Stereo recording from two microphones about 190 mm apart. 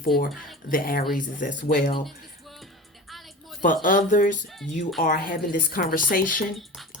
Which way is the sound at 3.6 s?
45° left (ahead or behind).